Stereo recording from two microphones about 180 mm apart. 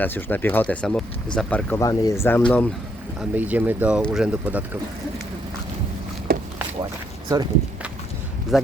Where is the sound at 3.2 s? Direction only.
10° right (ahead or behind).